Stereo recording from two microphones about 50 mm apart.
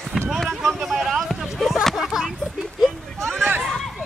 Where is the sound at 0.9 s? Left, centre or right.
Centre.